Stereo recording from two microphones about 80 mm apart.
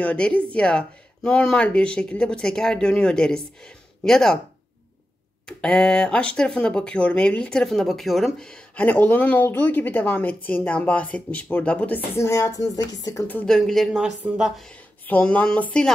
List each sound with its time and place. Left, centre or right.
0.0 s speech: centre
5.5 s speech: centre
8.8 s speech: left
12.2 s speech: left
13.2 s speech: left
13.5 s speech: centre
14.2 s speech: right
15.0 s speech: centre